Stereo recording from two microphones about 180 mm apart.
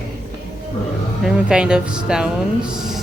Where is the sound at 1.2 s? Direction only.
5° right (ahead or behind).